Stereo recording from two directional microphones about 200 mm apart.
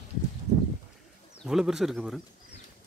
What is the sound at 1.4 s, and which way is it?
Speech, centre (ahead or behind).